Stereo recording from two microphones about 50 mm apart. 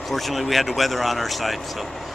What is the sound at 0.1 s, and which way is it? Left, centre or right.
Speech, centre.